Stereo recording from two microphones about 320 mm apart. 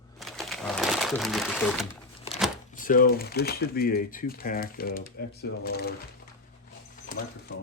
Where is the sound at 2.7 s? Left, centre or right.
Left.